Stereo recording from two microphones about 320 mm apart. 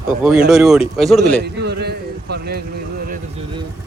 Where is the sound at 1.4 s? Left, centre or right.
Right.